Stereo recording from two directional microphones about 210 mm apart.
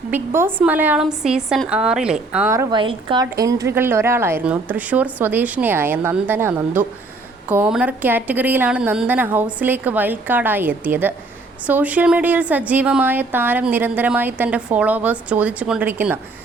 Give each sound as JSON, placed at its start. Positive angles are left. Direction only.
{"t": 0.1, "sound": "a woman's voice", "side_deg": -10}